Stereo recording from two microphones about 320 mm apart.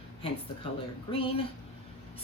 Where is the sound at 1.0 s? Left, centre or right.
Centre.